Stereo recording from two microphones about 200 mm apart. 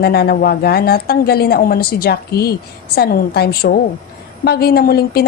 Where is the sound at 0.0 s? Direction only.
50° left (ahead or behind).